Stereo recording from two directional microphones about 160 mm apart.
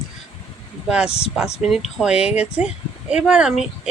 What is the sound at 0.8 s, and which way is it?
Speech, 5° right (ahead or behind).